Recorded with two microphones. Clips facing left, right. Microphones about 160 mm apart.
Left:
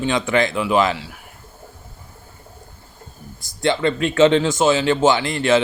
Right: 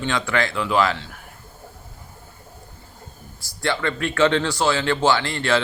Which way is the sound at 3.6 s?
20° left (ahead or behind).